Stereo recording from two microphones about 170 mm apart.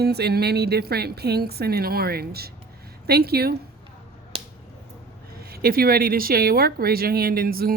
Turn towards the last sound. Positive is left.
turn(degrees=-60)  # may be behind; listen again after turning